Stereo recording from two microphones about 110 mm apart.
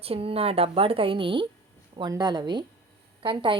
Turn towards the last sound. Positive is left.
turn(degrees=-50)  # may be behind; listen again after turning